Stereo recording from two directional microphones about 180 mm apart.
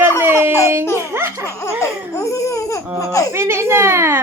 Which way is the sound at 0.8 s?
15° left (ahead or behind).